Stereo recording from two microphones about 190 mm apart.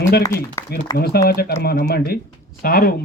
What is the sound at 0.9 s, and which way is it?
A man's voice, 55° left (ahead or behind).